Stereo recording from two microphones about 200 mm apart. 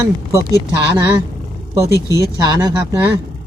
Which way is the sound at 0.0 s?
15° right (ahead or behind).